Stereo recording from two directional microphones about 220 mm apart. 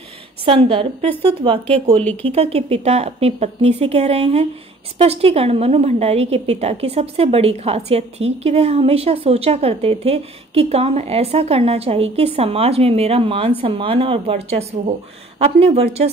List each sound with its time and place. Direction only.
0.5 s a woman's voice: 25° right (ahead or behind)